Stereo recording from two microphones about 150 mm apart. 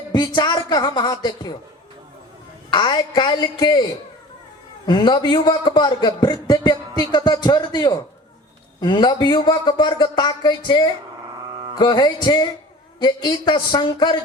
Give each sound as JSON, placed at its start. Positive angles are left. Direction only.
{"t": 0.1, "sound": "a man's voice", "side_deg": 30}
{"t": 2.7, "sound": "speech", "side_deg": 30}
{"t": 4.9, "sound": "a man's voice", "side_deg": 30}